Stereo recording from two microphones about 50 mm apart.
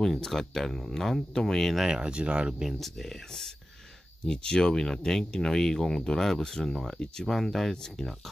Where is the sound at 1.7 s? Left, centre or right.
Centre.